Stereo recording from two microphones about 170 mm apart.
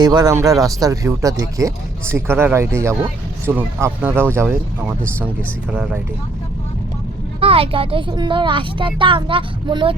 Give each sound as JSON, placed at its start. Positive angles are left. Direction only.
{"t": 0.0, "sound": "speech", "side_deg": -25}
{"t": 7.3, "sound": "speech", "side_deg": -35}